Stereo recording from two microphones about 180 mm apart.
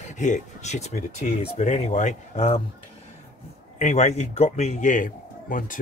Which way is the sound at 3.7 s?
40° left (ahead or behind).